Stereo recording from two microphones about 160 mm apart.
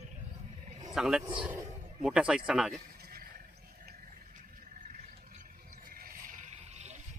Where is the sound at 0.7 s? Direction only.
50° right (ahead or behind).